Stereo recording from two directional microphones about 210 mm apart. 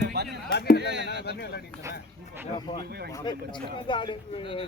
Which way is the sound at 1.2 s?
50° left (ahead or behind).